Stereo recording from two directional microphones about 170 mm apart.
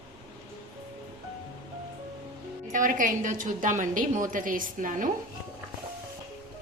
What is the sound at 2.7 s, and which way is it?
A woman's voice, 50° right (ahead or behind).